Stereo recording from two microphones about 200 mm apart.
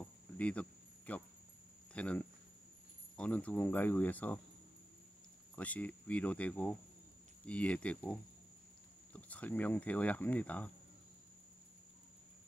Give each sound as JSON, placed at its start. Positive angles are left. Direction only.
{"t": 0.0, "sound": "a sound", "side_deg": 5}
{"t": 2.0, "sound": "speech", "side_deg": 5}
{"t": 5.6, "sound": "speech", "side_deg": 10}